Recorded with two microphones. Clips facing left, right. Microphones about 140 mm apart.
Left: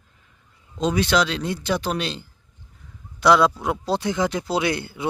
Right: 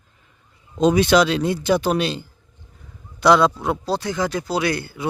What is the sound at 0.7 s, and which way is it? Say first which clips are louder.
Speech: right 5 dB; 15° right (ahead or behind).